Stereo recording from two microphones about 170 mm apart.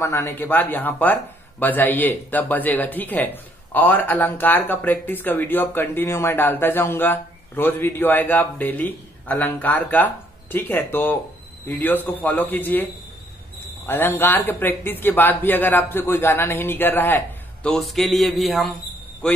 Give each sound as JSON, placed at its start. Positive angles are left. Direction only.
{"t": 0.0, "sound": "speech", "side_deg": 15}
{"t": 13.8, "sound": "speech", "side_deg": 10}
{"t": 17.6, "sound": "a sound", "side_deg": 0}